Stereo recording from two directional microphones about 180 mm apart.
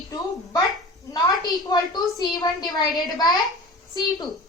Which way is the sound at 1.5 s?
20° left (ahead or behind).